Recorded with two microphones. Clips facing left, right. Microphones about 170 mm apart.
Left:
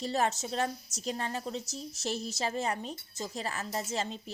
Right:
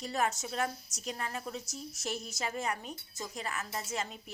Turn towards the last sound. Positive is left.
turn(degrees=30)  # may be behind; listen again after turning